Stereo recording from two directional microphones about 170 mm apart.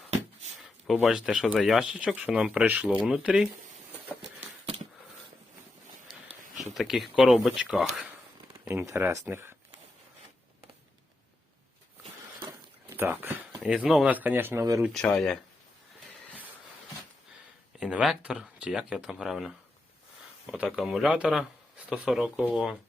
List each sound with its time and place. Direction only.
0.9 s speech: 5° right (ahead or behind)
6.4 s a sound: 45° right (ahead or behind)
6.7 s speech: centre (ahead or behind)
8.9 s speech: 15° right (ahead or behind)
13.0 s a sound: 10° right (ahead or behind)
13.6 s speech: 5° right (ahead or behind); by 14.8 s 20° right (ahead or behind)
14.8 s speech: 5° left (ahead or behind)
17.7 s speech: centre (ahead or behind)